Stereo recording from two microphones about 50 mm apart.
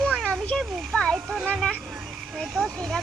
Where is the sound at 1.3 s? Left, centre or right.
Centre.